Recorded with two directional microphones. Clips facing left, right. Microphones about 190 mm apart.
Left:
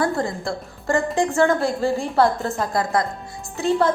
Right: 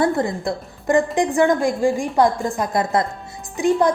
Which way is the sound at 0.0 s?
20° right (ahead or behind).